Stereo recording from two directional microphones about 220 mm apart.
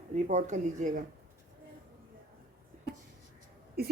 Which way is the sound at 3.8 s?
45° right (ahead or behind).